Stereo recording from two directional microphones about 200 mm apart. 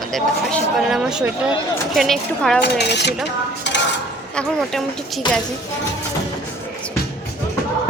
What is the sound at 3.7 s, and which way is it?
Cutlery, 60° left (ahead or behind).